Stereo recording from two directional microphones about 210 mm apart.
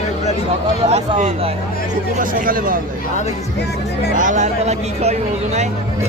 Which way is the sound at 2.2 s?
40° right (ahead or behind).